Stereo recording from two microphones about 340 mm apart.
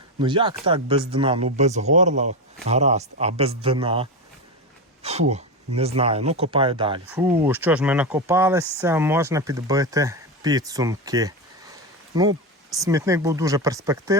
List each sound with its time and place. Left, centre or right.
0.2 s speech: centre